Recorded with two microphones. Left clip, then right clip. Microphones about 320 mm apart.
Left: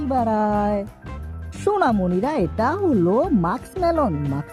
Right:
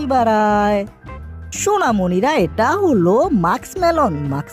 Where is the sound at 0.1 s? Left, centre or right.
Centre.